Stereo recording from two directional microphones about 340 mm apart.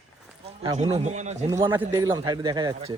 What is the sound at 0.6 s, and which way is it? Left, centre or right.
A man's voice, centre.